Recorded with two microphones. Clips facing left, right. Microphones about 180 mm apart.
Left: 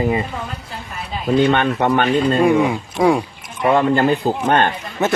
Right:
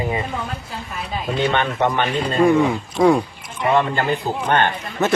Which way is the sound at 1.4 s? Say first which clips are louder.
Left 3 dB; 55° left (ahead or behind).